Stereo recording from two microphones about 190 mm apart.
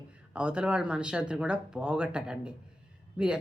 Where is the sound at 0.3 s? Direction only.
5° right (ahead or behind).